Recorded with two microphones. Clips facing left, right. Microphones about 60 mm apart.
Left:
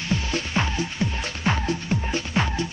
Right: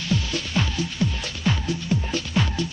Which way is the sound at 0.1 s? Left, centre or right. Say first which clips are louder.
Even; left.